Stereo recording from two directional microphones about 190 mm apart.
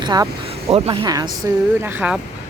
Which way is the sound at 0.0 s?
20° right (ahead or behind).